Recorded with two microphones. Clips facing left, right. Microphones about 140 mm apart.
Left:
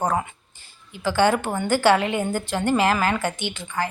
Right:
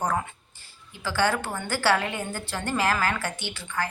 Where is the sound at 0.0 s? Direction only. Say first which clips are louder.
Left 4 dB; 20° left (ahead or behind).